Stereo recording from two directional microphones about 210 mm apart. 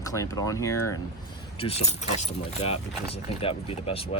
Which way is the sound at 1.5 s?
30° left (ahead or behind).